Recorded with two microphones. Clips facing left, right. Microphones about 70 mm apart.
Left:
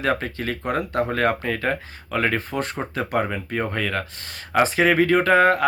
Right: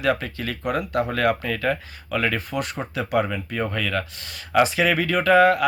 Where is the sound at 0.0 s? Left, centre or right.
Left.